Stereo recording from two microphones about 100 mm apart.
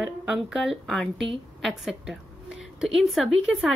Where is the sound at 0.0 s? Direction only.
5° right (ahead or behind).